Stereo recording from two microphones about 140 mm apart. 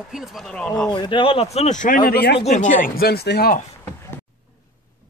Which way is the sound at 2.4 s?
60° left (ahead or behind).